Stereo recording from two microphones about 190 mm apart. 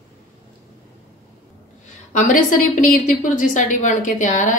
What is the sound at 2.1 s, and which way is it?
A woman's voice, 45° left (ahead or behind).